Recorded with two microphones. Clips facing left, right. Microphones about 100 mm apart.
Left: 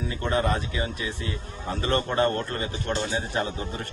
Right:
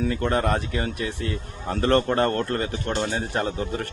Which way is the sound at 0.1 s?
60° right (ahead or behind).